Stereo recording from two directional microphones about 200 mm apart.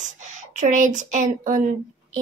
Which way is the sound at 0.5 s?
40° right (ahead or behind).